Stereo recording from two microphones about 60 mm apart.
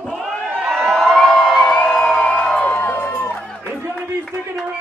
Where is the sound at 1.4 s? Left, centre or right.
Centre.